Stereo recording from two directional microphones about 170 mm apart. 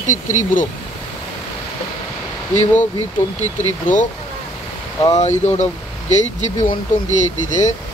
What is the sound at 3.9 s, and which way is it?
Speech, 50° left (ahead or behind).